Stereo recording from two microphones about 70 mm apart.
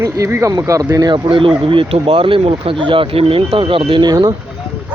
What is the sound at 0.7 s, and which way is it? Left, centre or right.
Speech, right.